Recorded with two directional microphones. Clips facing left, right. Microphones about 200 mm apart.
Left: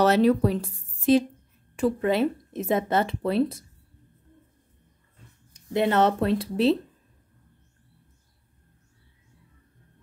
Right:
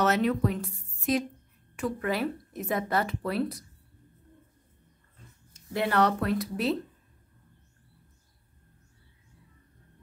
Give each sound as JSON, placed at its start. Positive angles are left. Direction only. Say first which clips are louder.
{"t": 0.0, "sound": "speech", "louder": "left 6 dB", "side_deg": 35}
{"t": 5.5, "sound": "speech", "louder": "left 5 dB", "side_deg": 20}